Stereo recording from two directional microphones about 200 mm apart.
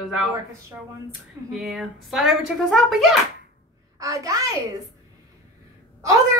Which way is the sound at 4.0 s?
15° right (ahead or behind).